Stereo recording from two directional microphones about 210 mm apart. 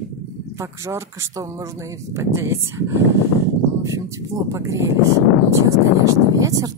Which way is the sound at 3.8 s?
15° right (ahead or behind).